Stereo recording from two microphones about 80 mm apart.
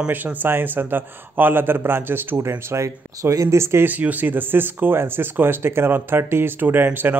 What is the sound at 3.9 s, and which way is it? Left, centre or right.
Speech, right.